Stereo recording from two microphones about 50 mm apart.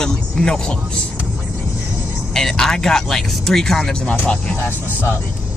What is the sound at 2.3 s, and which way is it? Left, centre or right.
Speech, centre.